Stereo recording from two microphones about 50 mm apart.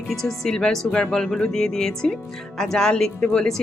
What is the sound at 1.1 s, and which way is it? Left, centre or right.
Speech, centre.